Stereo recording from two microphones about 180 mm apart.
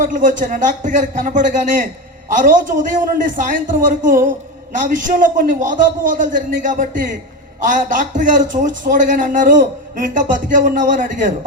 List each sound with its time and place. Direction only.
0.0 s a man's voice: 45° right (ahead or behind)